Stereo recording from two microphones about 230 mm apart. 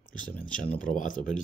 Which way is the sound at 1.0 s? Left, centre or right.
Left.